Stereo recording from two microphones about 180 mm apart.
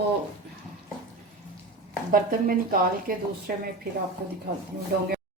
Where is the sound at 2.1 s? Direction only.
50° right (ahead or behind).